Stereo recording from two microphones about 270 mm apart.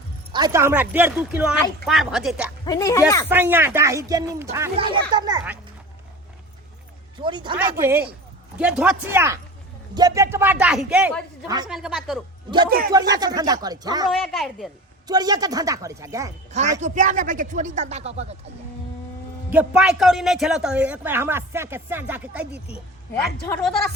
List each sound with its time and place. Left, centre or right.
0.3 s speech: centre
2.6 s speech: centre
3.2 s a woman's voice: centre
7.2 s a woman's voice: centre
11.7 s speech: centre
12.9 s a woman's voice: centre
14.1 s speech: centre
15.0 s a woman's voice: centre
16.8 s speech: right
19.5 s speech: centre
23.5 s speech: centre